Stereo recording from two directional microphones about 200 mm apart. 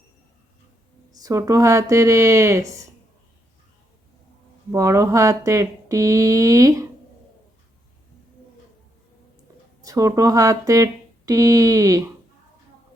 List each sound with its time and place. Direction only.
1.2 s speech: 15° right (ahead or behind)
4.7 s speech: 15° right (ahead or behind)
9.8 s speech: 15° right (ahead or behind)